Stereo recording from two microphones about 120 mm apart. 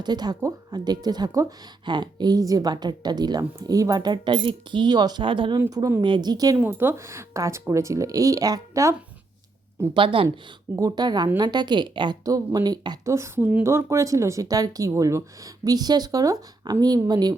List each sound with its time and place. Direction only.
0.0 s speech: 35° right (ahead or behind)
5.5 s a woman's voice: 25° right (ahead or behind)
6.6 s a woman's voice: 20° right (ahead or behind)
9.9 s speech: 45° right (ahead or behind)
10.8 s speech: 30° right (ahead or behind)
13.1 s a woman's voice: 25° right (ahead or behind)